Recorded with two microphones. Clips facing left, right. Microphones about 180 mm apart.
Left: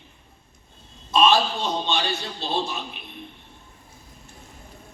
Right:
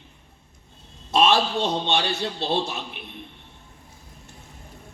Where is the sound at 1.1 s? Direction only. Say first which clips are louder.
Even; 70° right (ahead or behind).